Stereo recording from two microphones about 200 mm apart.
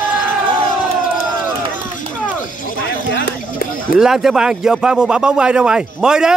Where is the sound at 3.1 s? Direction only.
50° left (ahead or behind).